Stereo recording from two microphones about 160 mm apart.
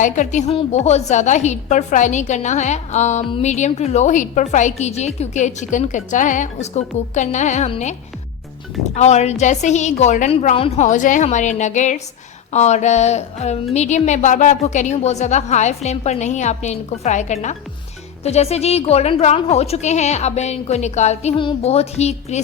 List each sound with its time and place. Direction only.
0.0 s a woman's voice: 50° left (ahead or behind)
9.0 s a woman's voice: 45° left (ahead or behind)